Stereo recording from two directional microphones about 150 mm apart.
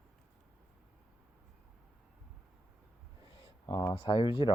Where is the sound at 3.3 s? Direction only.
30° left (ahead or behind).